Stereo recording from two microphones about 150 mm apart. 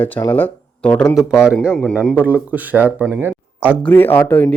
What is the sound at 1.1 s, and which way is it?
Speech, 20° left (ahead or behind).